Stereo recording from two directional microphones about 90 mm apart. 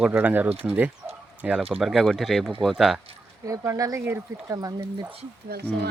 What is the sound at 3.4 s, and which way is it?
Speech, 35° right (ahead or behind).